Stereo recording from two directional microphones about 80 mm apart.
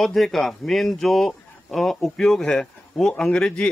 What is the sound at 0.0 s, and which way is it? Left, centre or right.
A man's voice, centre.